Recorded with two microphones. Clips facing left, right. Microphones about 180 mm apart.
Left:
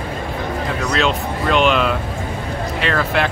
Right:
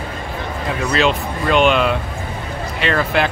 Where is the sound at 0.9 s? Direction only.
Centre (ahead or behind).